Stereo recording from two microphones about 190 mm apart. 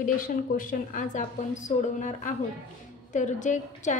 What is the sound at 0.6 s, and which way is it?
A woman's voice, 45° left (ahead or behind).